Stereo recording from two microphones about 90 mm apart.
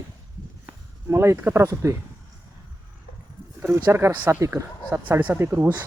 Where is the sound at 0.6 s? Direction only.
30° right (ahead or behind).